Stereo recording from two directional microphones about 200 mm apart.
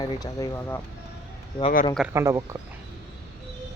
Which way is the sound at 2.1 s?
15° right (ahead or behind).